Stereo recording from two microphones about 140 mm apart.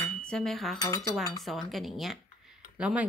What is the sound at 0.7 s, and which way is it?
Cutlery, 25° left (ahead or behind).